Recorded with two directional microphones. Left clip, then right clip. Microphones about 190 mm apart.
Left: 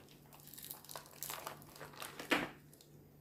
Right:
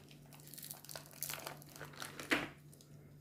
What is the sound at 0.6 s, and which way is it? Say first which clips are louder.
Crumpling: left 1 dB; 15° right (ahead or behind).